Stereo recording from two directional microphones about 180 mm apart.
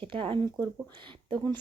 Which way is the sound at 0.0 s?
30° right (ahead or behind).